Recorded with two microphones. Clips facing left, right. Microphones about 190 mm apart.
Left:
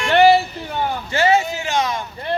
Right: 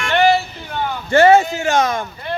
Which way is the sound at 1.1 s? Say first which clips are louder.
Right 7 dB; 50° right (ahead or behind).